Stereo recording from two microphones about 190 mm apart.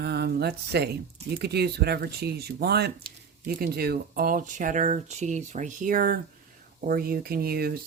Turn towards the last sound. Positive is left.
turn(degrees=-55)  # may be behind; listen again after turning